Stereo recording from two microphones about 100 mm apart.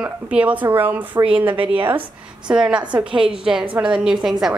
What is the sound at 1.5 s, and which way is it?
Speech, 65° right (ahead or behind).